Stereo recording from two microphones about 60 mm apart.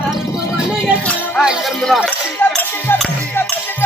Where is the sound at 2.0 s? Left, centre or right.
Left.